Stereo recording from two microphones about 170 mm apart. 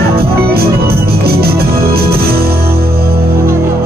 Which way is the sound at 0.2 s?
65° right (ahead or behind).